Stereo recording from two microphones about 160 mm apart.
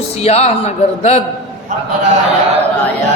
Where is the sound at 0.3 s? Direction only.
45° left (ahead or behind).